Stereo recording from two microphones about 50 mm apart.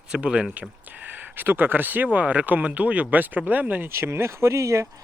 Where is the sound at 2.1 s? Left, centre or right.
Right.